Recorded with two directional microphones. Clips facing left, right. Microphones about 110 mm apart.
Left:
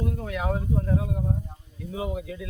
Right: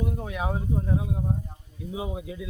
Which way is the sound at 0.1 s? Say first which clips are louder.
Left 2 dB; 20° right (ahead or behind).